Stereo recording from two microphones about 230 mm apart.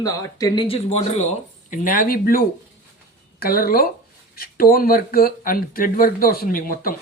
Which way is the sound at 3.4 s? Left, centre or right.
Left.